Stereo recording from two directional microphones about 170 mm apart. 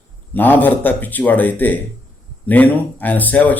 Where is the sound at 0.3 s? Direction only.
10° left (ahead or behind).